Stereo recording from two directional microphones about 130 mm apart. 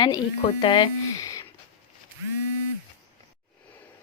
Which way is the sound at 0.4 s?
40° left (ahead or behind).